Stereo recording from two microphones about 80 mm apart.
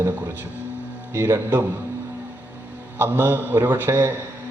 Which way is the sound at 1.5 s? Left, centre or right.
Right.